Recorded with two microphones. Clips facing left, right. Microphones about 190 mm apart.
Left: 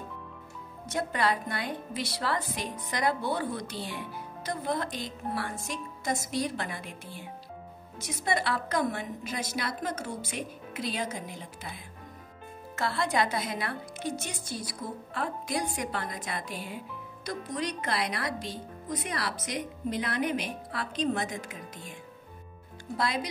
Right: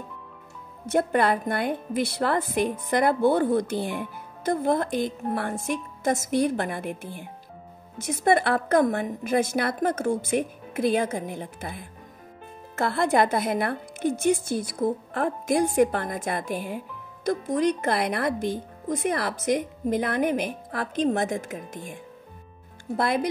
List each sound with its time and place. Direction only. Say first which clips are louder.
0.8 s a woman's voice: right 7 dB; 55° right (ahead or behind)